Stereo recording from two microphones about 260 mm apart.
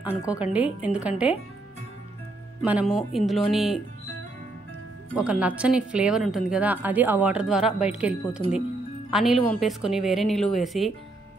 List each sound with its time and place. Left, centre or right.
0.3 s speech: centre
2.6 s speech: centre
5.1 s speech: centre